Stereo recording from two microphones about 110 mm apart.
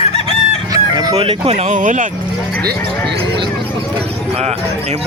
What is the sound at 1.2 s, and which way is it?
Speech, 65° right (ahead or behind).